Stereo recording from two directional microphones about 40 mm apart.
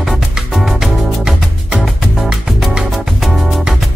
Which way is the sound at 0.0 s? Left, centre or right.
Centre.